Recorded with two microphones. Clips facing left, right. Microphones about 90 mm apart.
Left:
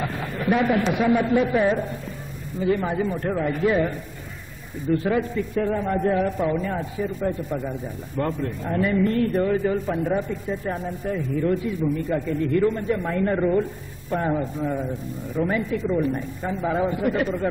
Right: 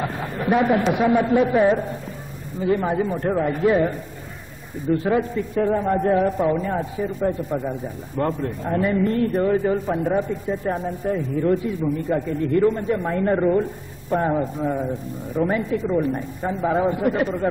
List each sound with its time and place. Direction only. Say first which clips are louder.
0.0 s a sound: right 1 dB; 20° right (ahead or behind)
0.9 s a man's voice: right 2 dB; 20° right (ahead or behind)
5.1 s a man's voice: right 2 dB; 15° right (ahead or behind)
8.2 s a man's voice: right 2 dB; 20° right (ahead or behind)
16.2 s a man's voice: right 3 dB; 20° right (ahead or behind)